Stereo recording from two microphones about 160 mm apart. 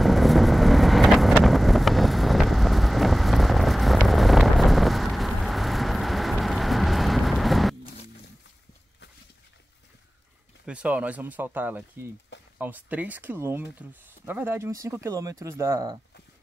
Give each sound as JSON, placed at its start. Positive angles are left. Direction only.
{"t": 0.0, "sound": "vehicle", "side_deg": 0}
{"t": 10.6, "sound": "speech", "side_deg": -5}